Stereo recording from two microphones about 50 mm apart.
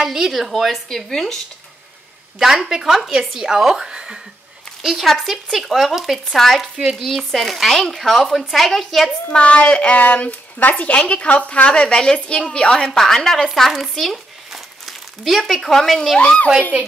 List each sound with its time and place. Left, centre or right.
0.0 s speech: centre
2.3 s speech: centre
4.8 s speech: centre
9.4 s a woman's voice: left
12.7 s a woman's voice: centre
16.2 s a woman's voice: left